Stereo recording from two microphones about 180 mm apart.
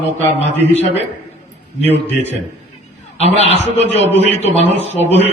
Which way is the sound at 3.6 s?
35° left (ahead or behind).